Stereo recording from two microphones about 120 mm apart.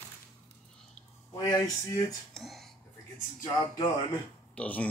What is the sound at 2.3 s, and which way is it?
Whispering, centre (ahead or behind).